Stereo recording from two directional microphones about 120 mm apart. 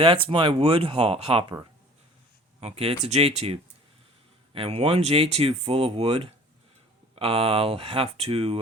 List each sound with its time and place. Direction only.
0.0 s speech: 45° right (ahead or behind)
2.6 s speech: 60° right (ahead or behind)